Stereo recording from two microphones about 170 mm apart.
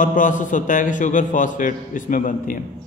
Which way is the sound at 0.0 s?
50° left (ahead or behind).